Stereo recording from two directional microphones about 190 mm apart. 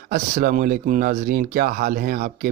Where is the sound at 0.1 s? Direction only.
45° right (ahead or behind).